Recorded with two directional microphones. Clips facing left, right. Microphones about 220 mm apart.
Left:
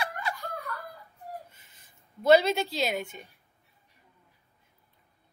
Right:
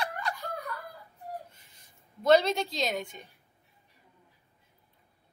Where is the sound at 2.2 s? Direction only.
5° left (ahead or behind).